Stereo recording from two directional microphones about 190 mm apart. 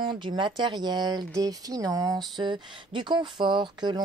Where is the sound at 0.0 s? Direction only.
25° right (ahead or behind).